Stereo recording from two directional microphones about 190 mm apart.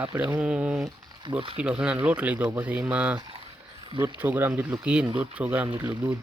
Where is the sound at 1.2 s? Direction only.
25° right (ahead or behind).